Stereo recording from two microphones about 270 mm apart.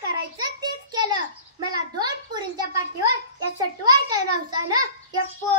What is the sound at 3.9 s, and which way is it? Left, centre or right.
Speech, centre.